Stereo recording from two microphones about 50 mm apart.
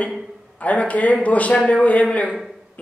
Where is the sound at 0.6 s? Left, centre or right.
Left.